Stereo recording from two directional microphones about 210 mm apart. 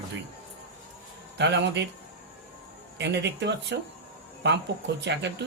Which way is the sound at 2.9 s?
55° right (ahead or behind).